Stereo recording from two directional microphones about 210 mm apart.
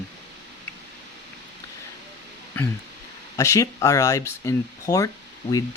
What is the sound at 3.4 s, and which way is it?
Speech, 15° left (ahead or behind).